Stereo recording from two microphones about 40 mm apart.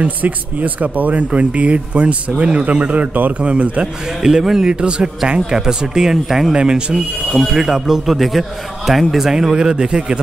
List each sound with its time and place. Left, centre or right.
0.2 s speech: right
3.4 s speech: right
4.2 s a man's voice: centre
7.4 s a man's voice: centre